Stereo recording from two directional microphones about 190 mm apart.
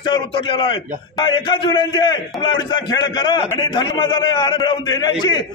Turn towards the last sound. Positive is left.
turn(degrees=20)  # may be behind; listen again after turning